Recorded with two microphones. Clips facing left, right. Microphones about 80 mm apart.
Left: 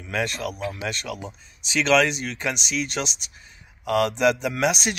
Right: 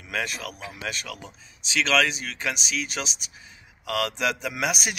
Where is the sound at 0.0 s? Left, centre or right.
Centre.